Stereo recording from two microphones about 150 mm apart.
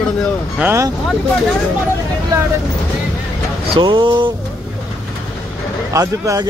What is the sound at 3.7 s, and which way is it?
Speech, 30° right (ahead or behind).